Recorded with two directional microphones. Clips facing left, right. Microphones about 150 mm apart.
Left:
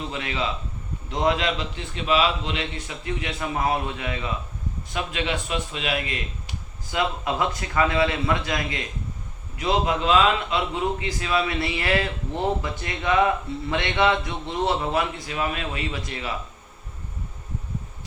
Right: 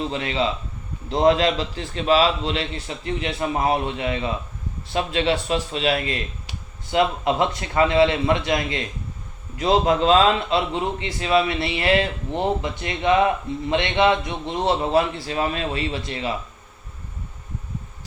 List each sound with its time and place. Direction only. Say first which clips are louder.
0.1 s a man's voice: right 5 dB; 30° right (ahead or behind)
9.6 s a man's voice: right 5 dB; 35° right (ahead or behind)